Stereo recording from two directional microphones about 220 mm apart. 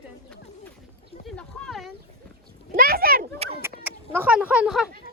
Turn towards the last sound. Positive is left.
turn(degrees=-5)  # may be behind; listen again after turning